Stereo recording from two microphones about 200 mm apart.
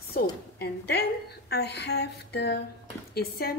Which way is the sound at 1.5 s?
55° left (ahead or behind).